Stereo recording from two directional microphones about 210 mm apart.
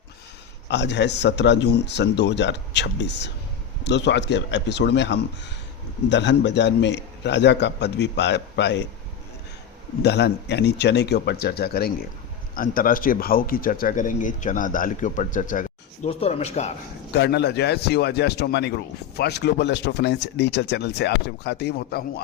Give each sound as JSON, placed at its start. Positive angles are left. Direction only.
{"t": 0.7, "sound": "a man's voice", "side_deg": 55}
{"t": 10.0, "sound": "speech", "side_deg": 50}
{"t": 17.2, "sound": "speech", "side_deg": 55}